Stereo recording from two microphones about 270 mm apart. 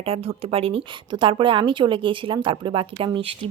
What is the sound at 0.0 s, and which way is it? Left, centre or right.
A woman's voice, right.